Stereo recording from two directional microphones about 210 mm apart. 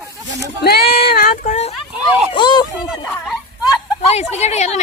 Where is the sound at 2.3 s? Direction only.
20° left (ahead or behind).